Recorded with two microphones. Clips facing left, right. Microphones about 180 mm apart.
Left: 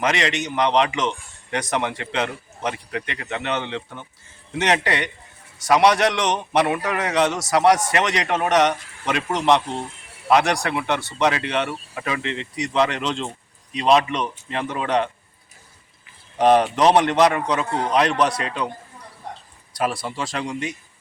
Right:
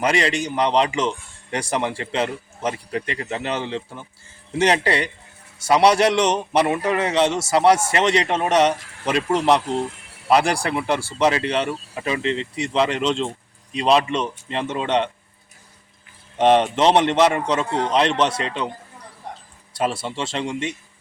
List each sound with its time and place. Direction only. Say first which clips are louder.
0.0 s a man's voice: right 2 dB; 35° right (ahead or behind)
16.4 s a man's voice: even; 25° right (ahead or behind)
17.7 s a man's voice: right 1 dB; 5° left (ahead or behind)
17.9 s a man's voice: even; 25° right (ahead or behind)
19.7 s a man's voice: right 1 dB; 25° right (ahead or behind)